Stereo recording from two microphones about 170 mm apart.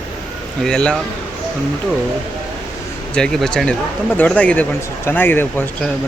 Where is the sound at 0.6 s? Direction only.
5° left (ahead or behind).